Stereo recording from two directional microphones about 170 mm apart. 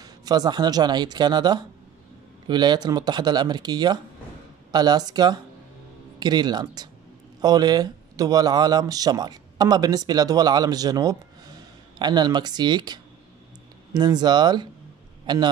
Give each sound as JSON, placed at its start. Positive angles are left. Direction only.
{"t": 0.0, "sound": "speech", "side_deg": -20}